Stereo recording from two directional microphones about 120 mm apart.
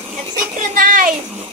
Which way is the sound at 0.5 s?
90° right.